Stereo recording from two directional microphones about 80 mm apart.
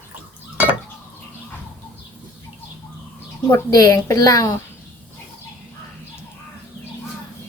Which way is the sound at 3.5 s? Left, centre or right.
Left.